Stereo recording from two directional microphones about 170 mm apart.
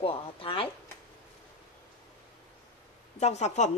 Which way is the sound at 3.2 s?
40° left (ahead or behind).